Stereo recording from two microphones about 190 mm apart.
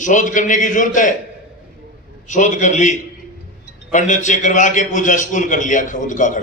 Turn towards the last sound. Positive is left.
turn(degrees=40)  # may be behind; listen again after turning